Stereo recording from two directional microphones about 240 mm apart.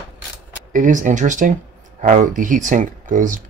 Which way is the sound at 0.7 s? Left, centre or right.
Right.